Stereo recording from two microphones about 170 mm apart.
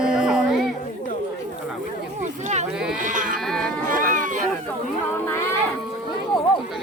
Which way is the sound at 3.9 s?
50° right (ahead or behind).